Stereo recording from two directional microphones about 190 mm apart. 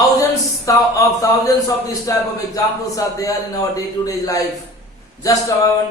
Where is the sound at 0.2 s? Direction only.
15° left (ahead or behind).